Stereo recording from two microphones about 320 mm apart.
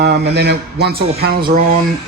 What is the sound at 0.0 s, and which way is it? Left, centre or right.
Speech, right.